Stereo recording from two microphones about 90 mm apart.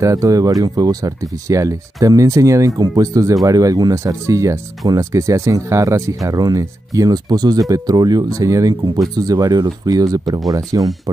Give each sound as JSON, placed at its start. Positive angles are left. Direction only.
{"t": 0.0, "sound": "speech", "side_deg": -40}
{"t": 8.8, "sound": "speech", "side_deg": -50}